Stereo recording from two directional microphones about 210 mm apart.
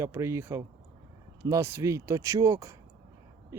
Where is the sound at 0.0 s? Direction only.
15° right (ahead or behind).